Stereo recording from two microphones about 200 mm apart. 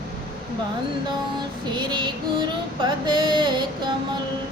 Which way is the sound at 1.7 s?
25° right (ahead or behind).